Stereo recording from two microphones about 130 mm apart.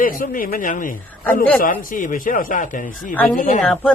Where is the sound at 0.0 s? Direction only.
90° left.